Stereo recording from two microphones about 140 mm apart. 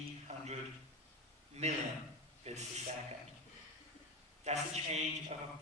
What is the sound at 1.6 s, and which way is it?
A man's voice, 55° right (ahead or behind).